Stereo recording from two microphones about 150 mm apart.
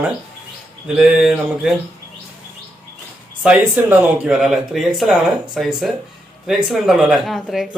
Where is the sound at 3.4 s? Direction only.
10° right (ahead or behind).